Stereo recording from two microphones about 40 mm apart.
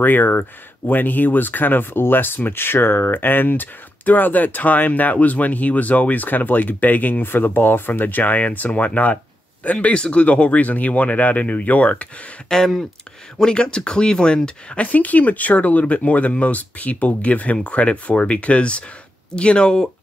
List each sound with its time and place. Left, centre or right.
0.0 s speech: left
9.9 s speech: left
12.4 s speech: centre
14.8 s speech: left